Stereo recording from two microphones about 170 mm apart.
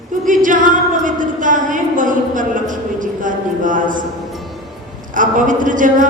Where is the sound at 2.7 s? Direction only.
50° right (ahead or behind).